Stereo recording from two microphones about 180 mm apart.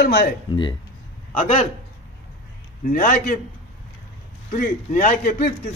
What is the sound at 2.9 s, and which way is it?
Speech, 50° left (ahead or behind).